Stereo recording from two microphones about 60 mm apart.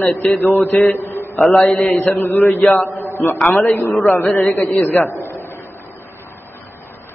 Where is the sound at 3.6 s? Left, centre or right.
Left.